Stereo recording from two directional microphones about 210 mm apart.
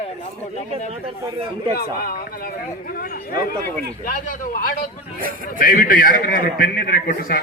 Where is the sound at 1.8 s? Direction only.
45° left (ahead or behind).